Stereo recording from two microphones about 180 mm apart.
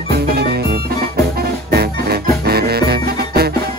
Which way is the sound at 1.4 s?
60° right (ahead or behind).